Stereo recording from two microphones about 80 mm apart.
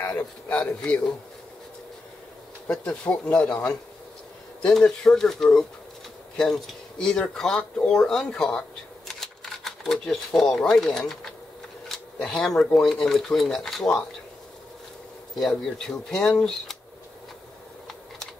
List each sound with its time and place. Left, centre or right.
0.0 s a man's voice: left
2.7 s speech: centre
4.6 s speech: centre
15.3 s speech: centre